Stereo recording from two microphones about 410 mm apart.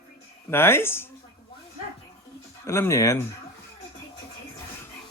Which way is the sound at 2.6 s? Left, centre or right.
Centre.